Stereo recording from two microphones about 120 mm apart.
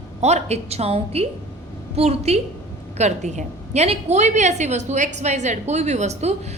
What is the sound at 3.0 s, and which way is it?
A woman's voice, 75° right (ahead or behind).